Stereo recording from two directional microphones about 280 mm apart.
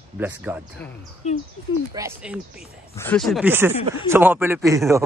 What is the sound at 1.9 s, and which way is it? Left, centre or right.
Speech, centre.